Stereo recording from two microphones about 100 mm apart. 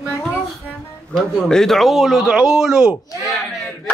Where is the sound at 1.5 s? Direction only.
5° left (ahead or behind).